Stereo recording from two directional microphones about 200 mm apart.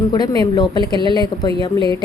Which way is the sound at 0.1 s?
20° left (ahead or behind).